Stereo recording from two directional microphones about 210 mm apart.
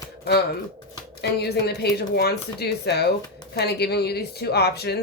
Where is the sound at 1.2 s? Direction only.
50° left (ahead or behind).